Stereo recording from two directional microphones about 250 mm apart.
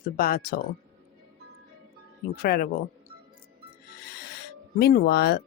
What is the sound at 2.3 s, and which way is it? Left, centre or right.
Speech, left.